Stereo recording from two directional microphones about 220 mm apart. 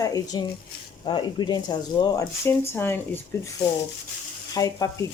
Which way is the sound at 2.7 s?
10° left (ahead or behind).